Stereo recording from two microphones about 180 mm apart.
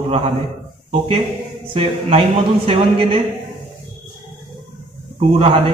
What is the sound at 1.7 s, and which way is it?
A woman's voice, 30° right (ahead or behind).